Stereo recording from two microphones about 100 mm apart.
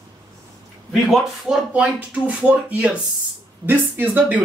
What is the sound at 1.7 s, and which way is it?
Speech, 15° right (ahead or behind).